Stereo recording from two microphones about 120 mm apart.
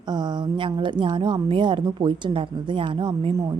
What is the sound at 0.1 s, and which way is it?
A woman's voice, 40° right (ahead or behind).